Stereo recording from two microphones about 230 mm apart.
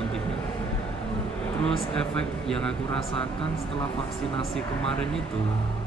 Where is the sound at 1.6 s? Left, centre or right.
Centre.